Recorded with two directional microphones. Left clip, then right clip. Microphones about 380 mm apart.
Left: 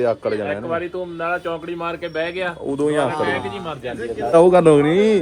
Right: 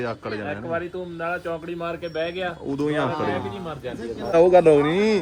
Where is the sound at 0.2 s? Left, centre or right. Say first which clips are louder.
Left 7 dB; left.